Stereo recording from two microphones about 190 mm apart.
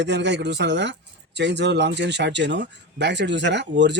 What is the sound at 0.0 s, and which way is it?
A man's voice, 65° right (ahead or behind).